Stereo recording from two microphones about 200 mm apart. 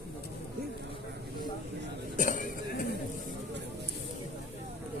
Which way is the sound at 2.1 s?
40° left (ahead or behind).